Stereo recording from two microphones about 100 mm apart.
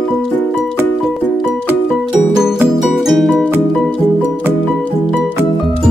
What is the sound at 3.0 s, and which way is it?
Music, centre (ahead or behind).